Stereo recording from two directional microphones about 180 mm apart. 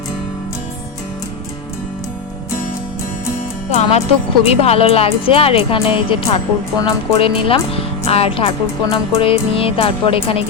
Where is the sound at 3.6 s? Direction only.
35° left (ahead or behind).